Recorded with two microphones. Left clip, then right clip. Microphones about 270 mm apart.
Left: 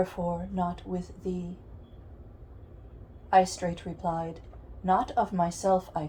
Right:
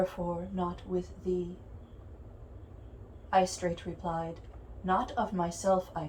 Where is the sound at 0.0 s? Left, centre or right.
Left.